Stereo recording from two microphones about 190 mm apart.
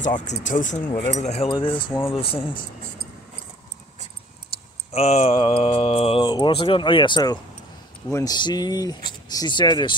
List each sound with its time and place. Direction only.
0.0 s speech: 40° left (ahead or behind)
1.2 s mantra: 35° left (ahead or behind)
4.5 s mantra: 30° left (ahead or behind)